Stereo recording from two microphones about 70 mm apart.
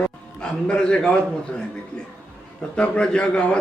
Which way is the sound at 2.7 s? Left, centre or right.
Centre.